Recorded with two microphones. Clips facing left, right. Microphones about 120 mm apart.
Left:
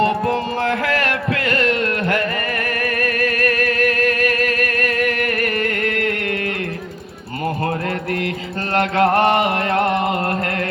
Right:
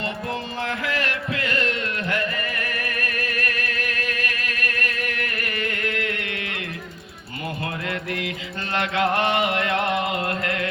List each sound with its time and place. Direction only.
0.0 s music: 55° left (ahead or behind)
8.7 s music: 45° left (ahead or behind)